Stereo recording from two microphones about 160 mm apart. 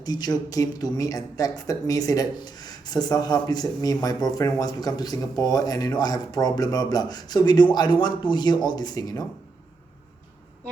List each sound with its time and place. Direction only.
0.0 s speech: 25° left (ahead or behind)